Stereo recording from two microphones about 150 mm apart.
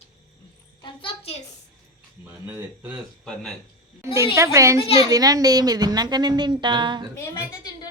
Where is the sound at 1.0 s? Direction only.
45° left (ahead or behind).